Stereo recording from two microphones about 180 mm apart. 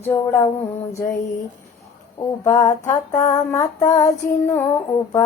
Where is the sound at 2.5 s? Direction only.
25° left (ahead or behind).